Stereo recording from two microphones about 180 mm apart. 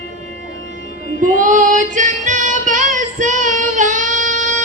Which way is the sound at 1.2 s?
45° right (ahead or behind).